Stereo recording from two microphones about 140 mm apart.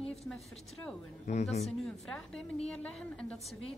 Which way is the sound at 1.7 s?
5° left (ahead or behind).